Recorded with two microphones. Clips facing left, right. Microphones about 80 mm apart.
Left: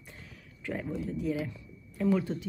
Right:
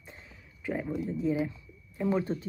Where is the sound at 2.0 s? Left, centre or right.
Right.